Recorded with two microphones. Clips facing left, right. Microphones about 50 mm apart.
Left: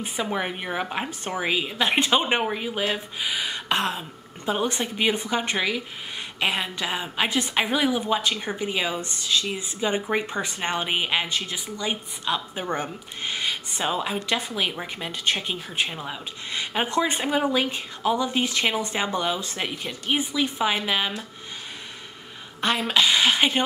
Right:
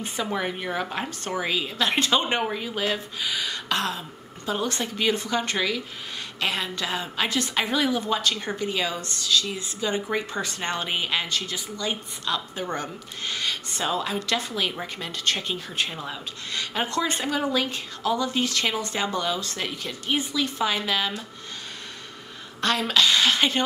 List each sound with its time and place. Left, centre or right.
0.2 s speech: centre
22.6 s speech: centre